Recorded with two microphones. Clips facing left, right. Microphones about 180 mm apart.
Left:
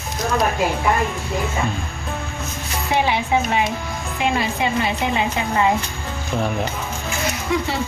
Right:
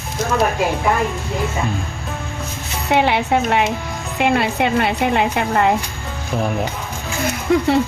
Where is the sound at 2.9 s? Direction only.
65° right (ahead or behind).